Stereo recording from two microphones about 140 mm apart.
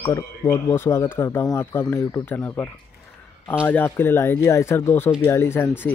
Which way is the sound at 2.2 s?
15° left (ahead or behind).